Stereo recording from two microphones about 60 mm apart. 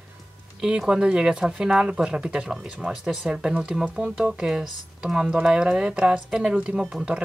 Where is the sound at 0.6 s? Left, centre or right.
Centre.